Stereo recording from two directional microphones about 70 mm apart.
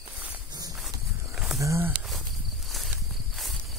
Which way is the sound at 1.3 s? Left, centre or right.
Centre.